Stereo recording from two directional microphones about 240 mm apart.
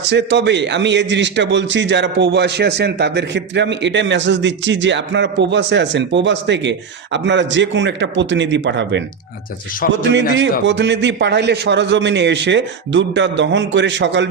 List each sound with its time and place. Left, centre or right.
0.1 s a man's voice: right